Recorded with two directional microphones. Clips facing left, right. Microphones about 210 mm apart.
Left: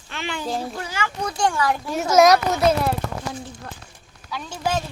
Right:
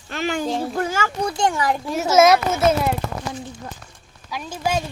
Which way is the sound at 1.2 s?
20° right (ahead or behind).